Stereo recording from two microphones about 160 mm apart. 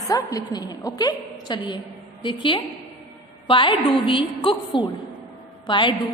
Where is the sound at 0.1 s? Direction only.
20° left (ahead or behind).